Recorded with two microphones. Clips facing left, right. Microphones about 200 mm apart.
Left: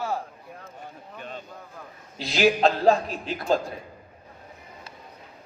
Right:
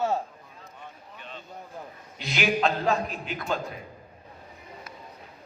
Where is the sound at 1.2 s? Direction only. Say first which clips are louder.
Left 6 dB; 45° left (ahead or behind).